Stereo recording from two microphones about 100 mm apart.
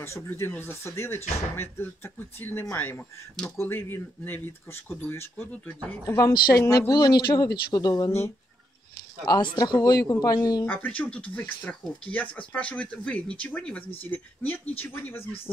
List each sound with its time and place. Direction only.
0.0 s speech: 25° left (ahead or behind)
6.9 s speech: 45° left (ahead or behind)
9.2 s speech: 40° left (ahead or behind)
10.6 s speech: 20° left (ahead or behind)